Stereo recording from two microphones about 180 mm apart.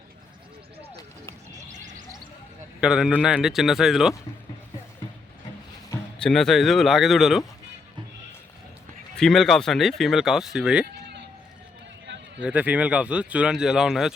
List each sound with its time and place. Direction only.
1.7 s a sound: 45° right (ahead or behind)
2.8 s speech: 5° right (ahead or behind)
6.1 s speech: 5° left (ahead or behind)
9.1 s speech: 5° left (ahead or behind)
12.4 s speech: 10° right (ahead or behind)